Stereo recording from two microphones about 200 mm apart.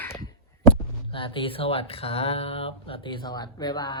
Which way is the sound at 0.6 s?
25° left (ahead or behind).